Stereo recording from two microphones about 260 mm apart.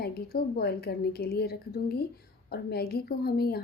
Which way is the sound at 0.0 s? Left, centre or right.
Left.